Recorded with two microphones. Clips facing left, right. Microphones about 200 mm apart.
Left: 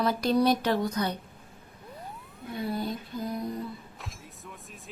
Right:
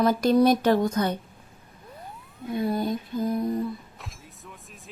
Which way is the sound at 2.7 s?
45° right (ahead or behind).